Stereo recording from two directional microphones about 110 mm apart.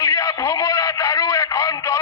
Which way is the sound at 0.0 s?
30° left (ahead or behind).